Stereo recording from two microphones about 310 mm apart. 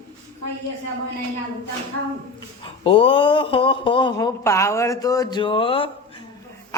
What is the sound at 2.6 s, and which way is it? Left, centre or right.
Speech, centre.